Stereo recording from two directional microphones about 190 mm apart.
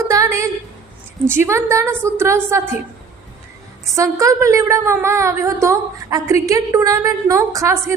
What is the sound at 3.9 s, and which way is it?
A woman's voice, 15° right (ahead or behind).